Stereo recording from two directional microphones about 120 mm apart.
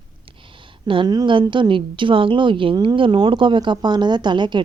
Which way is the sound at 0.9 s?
40° right (ahead or behind).